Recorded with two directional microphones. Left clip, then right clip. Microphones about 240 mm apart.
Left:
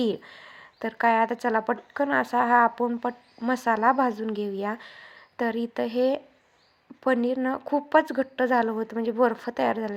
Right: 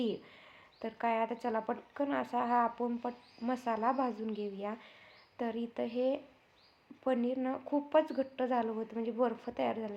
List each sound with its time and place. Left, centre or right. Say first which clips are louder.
0.0 s speech: left 9 dB; left